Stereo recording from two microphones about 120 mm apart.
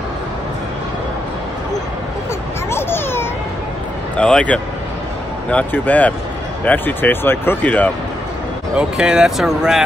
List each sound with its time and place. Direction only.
2.7 s a sound: 20° left (ahead or behind)
4.2 s speech: 10° left (ahead or behind)
8.7 s speech: 5° right (ahead or behind)